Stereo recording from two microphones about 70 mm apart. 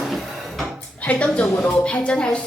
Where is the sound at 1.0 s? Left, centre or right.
Centre.